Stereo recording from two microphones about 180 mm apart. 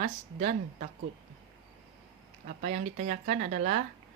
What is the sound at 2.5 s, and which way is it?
Speech, 45° right (ahead or behind).